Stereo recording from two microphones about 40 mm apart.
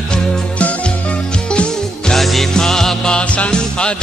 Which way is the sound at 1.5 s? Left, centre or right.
Left.